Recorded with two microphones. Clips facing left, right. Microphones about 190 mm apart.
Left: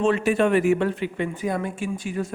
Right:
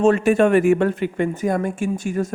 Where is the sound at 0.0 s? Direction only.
45° right (ahead or behind).